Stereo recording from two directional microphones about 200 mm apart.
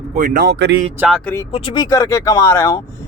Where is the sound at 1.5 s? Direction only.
25° left (ahead or behind).